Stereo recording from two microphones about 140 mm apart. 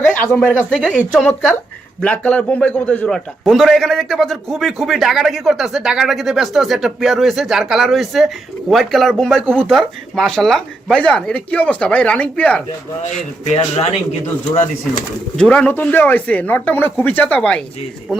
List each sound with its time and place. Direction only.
0.0 s a man's voice: 10° left (ahead or behind)
13.0 s speech: 55° left (ahead or behind)
15.4 s speech: 5° left (ahead or behind)